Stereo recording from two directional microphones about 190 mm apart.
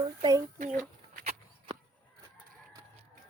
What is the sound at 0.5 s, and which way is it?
Speech, 40° right (ahead or behind).